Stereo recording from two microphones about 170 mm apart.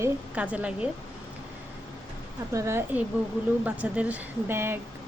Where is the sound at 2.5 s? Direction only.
15° right (ahead or behind).